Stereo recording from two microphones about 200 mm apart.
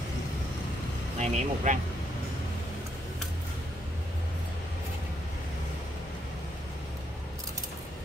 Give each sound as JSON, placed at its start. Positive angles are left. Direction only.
{"t": 1.2, "sound": "speech", "side_deg": -35}